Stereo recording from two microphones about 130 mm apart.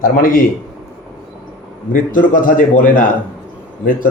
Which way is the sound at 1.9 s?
90° left.